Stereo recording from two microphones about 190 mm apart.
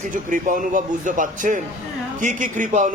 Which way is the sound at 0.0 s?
45° right (ahead or behind).